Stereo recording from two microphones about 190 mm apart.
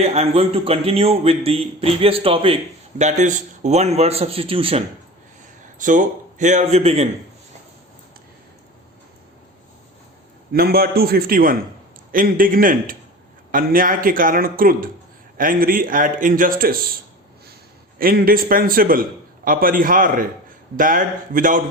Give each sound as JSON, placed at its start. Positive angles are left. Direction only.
{"t": 0.0, "sound": "a man's voice", "side_deg": -35}
{"t": 5.8, "sound": "a man's voice", "side_deg": -45}
{"t": 10.5, "sound": "a man's voice", "side_deg": -55}
{"t": 17.9, "sound": "a man's voice", "side_deg": -50}